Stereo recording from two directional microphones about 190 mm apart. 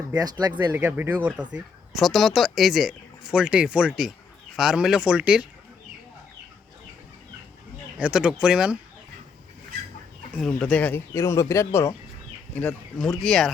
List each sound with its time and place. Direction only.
0.1 s speech: 20° right (ahead or behind)
0.7 s speech: 10° right (ahead or behind)
7.9 s speech: 5° right (ahead or behind)
10.3 s speech: 5° left (ahead or behind)
12.5 s speech: 5° left (ahead or behind)